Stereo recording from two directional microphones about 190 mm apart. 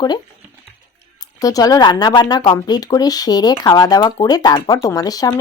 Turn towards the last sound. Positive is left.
turn(degrees=20)  # may be behind; listen again after turning